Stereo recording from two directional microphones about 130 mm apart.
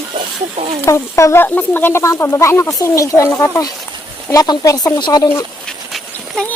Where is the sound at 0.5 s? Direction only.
50° right (ahead or behind).